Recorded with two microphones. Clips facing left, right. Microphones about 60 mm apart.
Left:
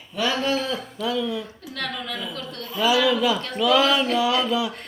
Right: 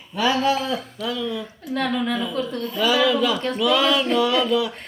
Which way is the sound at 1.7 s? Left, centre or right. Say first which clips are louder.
Right 8 dB; centre.